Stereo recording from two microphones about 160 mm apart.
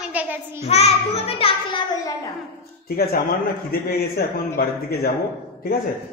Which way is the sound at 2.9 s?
75° left (ahead or behind).